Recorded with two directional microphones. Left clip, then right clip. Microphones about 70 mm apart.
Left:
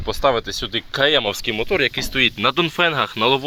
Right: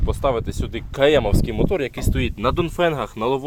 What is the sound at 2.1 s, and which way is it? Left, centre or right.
Speech, centre.